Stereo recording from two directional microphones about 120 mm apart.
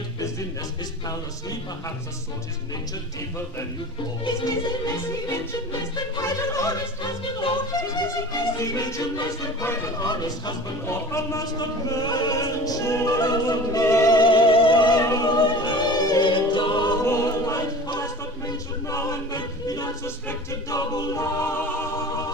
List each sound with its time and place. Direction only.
6.1 s a capella: 30° left (ahead or behind)
10.0 s opera: 35° left (ahead or behind)
11.1 s a capella: 25° left (ahead or behind)
11.6 s opera: 35° left (ahead or behind)
13.8 s a capella: 25° left (ahead or behind)
14.2 s music: 45° left (ahead or behind)
15.0 s opera: 25° left (ahead or behind)
15.4 s music: 40° left (ahead or behind)
17.1 s choir: 30° left (ahead or behind)
20.2 s a capella: 25° left (ahead or behind)